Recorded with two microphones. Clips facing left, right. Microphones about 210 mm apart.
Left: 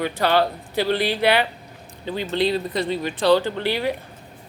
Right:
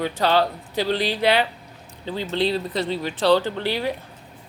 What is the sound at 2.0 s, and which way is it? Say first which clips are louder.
Speech: left 1 dB; 15° left (ahead or behind).